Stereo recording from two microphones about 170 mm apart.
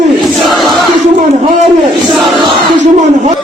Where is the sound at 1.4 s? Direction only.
45° right (ahead or behind).